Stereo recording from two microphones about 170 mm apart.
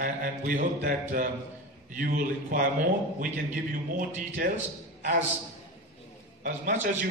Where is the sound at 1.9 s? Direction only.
55° right (ahead or behind).